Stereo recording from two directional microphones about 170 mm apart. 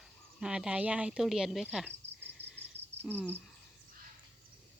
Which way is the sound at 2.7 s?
40° right (ahead or behind).